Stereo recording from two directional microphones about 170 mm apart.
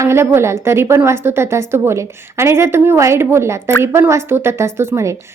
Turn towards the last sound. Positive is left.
turn(degrees=-15)  # may be behind; listen again after turning